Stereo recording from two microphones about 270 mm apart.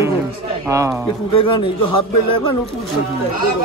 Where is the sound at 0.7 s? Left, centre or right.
Centre.